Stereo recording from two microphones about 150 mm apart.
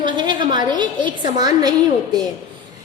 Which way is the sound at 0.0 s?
30° right (ahead or behind).